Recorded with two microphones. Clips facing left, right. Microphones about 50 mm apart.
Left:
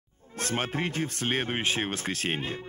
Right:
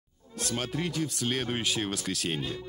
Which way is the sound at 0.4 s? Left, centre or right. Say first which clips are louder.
Left 2 dB; left.